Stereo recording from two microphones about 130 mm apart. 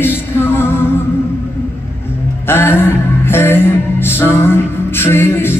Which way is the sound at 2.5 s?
15° left (ahead or behind).